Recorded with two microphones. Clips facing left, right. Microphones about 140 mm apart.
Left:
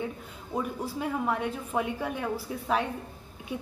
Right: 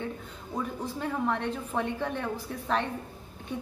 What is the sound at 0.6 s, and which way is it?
A woman's voice, 10° left (ahead or behind).